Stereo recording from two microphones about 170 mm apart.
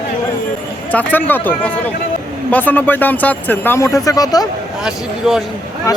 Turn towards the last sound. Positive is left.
turn(degrees=20)  # may be behind; listen again after turning